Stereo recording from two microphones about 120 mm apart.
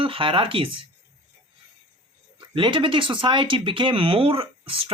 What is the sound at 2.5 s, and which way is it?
Speech, 45° right (ahead or behind).